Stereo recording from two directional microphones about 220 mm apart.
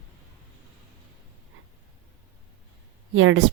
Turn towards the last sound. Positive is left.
turn(degrees=-65)  # may be behind; listen again after turning